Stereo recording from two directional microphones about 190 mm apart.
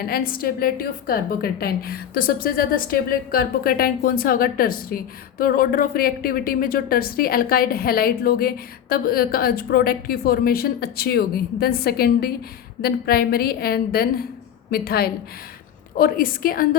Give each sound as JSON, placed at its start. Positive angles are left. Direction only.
{"t": 0.1, "sound": "a woman's voice", "side_deg": 50}